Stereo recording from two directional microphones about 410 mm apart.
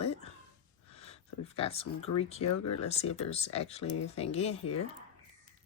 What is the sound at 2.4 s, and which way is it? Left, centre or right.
Speech, left.